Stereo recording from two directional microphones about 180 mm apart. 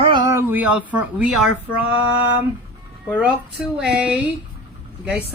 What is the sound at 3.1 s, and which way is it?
Speech, 5° right (ahead or behind).